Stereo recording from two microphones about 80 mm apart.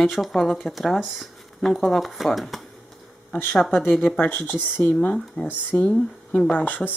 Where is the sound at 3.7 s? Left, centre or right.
Left.